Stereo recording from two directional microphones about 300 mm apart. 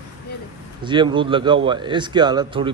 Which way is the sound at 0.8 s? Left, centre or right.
Centre.